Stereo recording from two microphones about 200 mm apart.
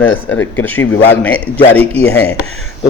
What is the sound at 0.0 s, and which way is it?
A man's voice, 10° left (ahead or behind).